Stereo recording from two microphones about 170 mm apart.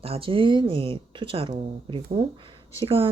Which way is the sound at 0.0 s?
35° right (ahead or behind).